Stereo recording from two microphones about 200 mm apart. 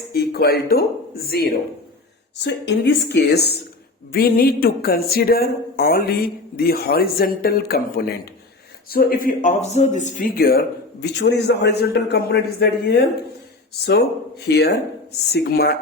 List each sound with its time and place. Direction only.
0.1 s a man's voice: 50° left (ahead or behind)
11.0 s a man's voice: 60° left (ahead or behind)